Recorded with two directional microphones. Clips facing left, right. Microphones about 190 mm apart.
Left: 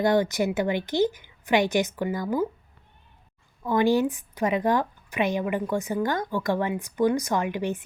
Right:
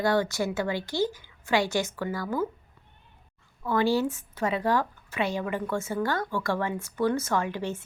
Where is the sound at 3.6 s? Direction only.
15° left (ahead or behind).